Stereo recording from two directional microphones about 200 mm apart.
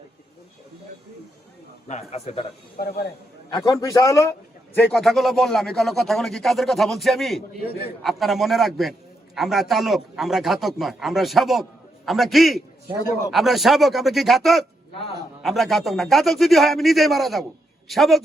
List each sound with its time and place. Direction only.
1.9 s a man's voice: 30° left (ahead or behind)
3.5 s a man's voice: 20° left (ahead or behind); by 18.2 s centre (ahead or behind)